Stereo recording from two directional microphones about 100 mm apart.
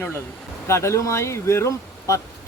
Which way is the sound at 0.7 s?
30° left (ahead or behind).